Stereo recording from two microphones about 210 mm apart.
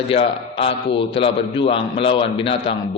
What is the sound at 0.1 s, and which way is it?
A man's voice, 25° left (ahead or behind).